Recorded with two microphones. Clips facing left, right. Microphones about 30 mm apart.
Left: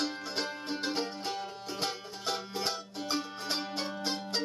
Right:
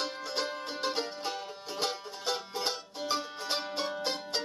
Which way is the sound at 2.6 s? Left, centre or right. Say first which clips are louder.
Right 1 dB; centre.